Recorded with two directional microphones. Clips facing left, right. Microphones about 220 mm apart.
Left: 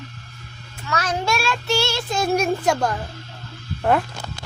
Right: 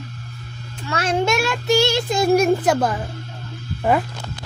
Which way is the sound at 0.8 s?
30° right (ahead or behind).